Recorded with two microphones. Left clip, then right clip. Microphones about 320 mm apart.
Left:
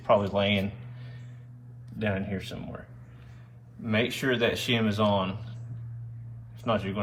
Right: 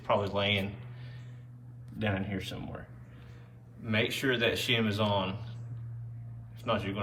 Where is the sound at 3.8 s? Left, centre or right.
Centre.